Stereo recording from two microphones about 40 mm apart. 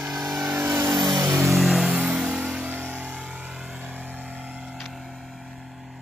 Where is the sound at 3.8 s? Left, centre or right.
Right.